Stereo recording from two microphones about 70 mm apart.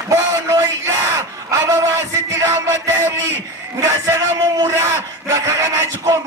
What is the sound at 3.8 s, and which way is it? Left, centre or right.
A man's voice, right.